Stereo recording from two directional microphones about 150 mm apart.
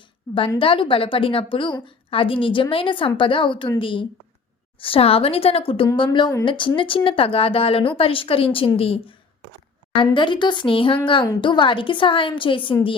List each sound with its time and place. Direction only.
0.6 s speech: 35° left (ahead or behind)